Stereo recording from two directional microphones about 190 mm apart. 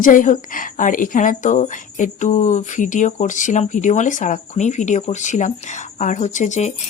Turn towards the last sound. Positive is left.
turn(degrees=40)  # may be behind; listen again after turning